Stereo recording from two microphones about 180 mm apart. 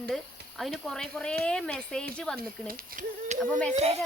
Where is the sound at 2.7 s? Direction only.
50° right (ahead or behind).